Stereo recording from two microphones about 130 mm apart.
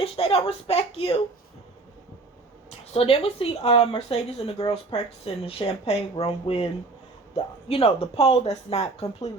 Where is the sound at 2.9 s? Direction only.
45° left (ahead or behind).